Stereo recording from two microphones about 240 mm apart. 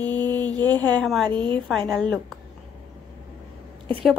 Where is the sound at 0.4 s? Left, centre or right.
Centre.